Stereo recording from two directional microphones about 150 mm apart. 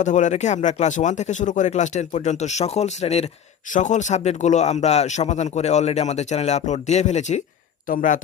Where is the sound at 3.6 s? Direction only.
55° left (ahead or behind).